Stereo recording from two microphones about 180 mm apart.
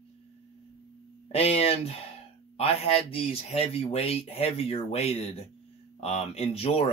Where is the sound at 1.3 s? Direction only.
35° left (ahead or behind).